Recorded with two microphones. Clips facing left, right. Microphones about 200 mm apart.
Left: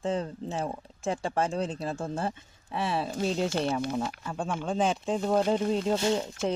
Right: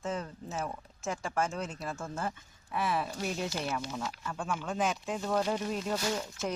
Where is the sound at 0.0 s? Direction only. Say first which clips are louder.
Left 6 dB; 30° left (ahead or behind).